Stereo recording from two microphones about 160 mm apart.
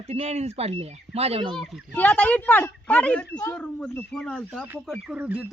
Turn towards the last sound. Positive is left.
turn(degrees=-10)  # may be behind; listen again after turning